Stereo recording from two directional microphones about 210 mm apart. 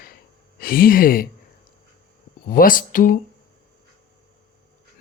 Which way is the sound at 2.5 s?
40° left (ahead or behind).